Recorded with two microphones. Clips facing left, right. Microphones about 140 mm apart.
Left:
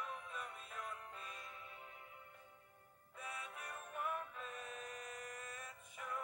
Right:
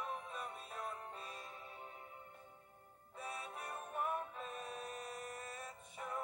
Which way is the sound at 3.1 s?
35° right (ahead or behind).